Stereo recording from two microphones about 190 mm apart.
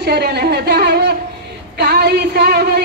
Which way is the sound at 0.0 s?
60° right (ahead or behind).